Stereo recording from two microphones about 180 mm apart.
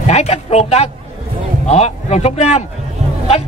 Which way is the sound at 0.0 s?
40° left (ahead or behind).